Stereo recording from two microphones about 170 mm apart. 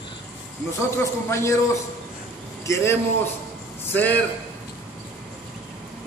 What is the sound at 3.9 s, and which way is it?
Speech, 10° left (ahead or behind).